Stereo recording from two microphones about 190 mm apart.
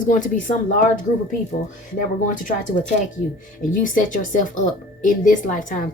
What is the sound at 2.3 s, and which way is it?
Speech, 45° left (ahead or behind).